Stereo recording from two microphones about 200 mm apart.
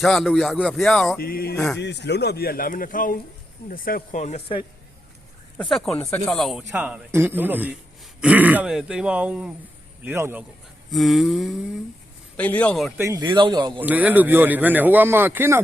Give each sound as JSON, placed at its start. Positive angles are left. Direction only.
{"t": 0.0, "sound": "speech", "side_deg": 0}
{"t": 1.2, "sound": "speech", "side_deg": 50}
{"t": 1.5, "sound": "speech", "side_deg": 5}
{"t": 1.8, "sound": "speech", "side_deg": 60}
{"t": 5.5, "sound": "speech", "side_deg": 0}
{"t": 10.9, "sound": "a man's voice", "side_deg": 0}
{"t": 13.0, "sound": "speech", "side_deg": -20}
{"t": 13.8, "sound": "speech", "side_deg": -10}